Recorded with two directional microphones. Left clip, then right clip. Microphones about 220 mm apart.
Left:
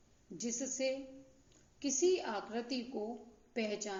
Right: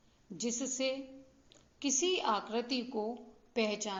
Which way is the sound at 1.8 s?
15° right (ahead or behind).